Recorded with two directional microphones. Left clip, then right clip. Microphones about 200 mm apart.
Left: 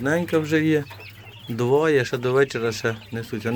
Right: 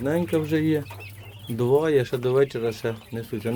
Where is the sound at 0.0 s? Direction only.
Centre (ahead or behind).